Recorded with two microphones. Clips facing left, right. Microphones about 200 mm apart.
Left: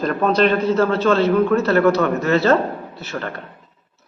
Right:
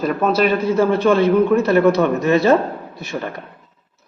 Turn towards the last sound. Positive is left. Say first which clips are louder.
# right 2 dB
turn(degrees=-15)  # may be behind; listen again after turning